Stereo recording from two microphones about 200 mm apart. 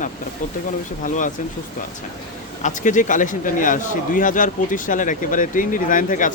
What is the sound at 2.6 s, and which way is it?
A man's voice, 40° left (ahead or behind).